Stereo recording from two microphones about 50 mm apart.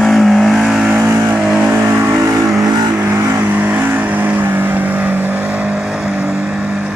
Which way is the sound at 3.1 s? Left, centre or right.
Right.